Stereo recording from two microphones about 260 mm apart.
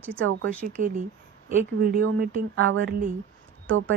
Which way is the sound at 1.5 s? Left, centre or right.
Right.